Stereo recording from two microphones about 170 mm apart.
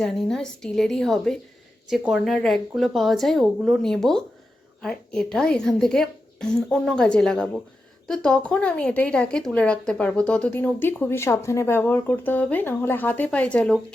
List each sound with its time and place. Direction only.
0.0 s a woman's voice: 5° left (ahead or behind)